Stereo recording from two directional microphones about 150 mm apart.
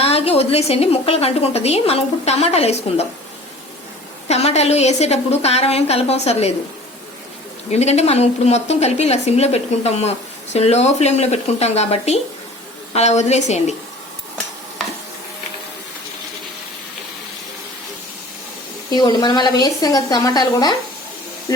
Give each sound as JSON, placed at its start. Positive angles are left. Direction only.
{"t": 0.0, "sound": "a woman's voice", "side_deg": 40}
{"t": 4.3, "sound": "a woman's voice", "side_deg": 45}
{"t": 7.7, "sound": "a woman's voice", "side_deg": 45}
{"t": 18.9, "sound": "a woman's voice", "side_deg": 25}